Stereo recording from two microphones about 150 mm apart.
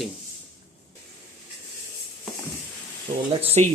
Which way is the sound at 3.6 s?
45° right (ahead or behind).